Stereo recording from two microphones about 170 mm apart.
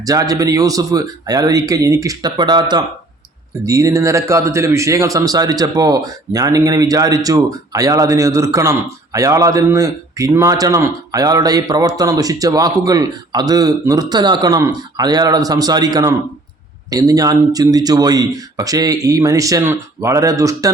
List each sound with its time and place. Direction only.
0.0 s a man's voice: 20° right (ahead or behind)